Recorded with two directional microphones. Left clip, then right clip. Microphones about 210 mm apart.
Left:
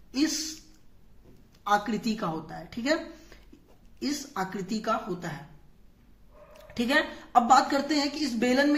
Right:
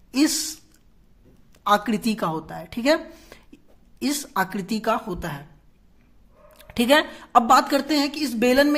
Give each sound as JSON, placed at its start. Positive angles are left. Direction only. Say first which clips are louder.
{"t": 0.1, "sound": "a sound", "louder": "right 6 dB", "side_deg": -45}
{"t": 1.6, "sound": "a woman's voice", "louder": "right 6 dB", "side_deg": -40}
{"t": 6.6, "sound": "a woman's voice", "louder": "right 7 dB", "side_deg": -45}